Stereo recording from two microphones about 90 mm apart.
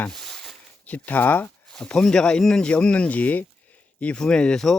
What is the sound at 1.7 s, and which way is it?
Speech, 10° left (ahead or behind).